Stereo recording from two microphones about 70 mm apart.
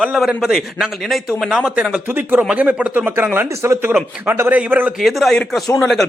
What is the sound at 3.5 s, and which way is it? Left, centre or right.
Speech, right.